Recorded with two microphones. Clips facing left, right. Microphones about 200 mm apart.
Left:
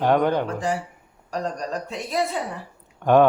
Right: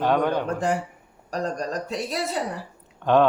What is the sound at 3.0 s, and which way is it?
Speech, 10° left (ahead or behind).